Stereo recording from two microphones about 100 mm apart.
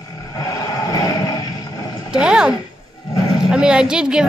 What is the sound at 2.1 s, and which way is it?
A woman's voice, 10° right (ahead or behind).